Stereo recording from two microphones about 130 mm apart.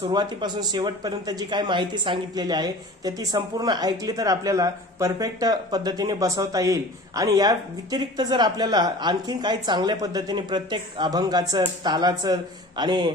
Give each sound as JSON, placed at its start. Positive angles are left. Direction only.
{"t": 0.1, "sound": "speech", "side_deg": -35}